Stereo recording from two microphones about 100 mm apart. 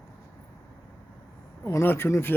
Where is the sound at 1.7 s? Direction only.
30° left (ahead or behind).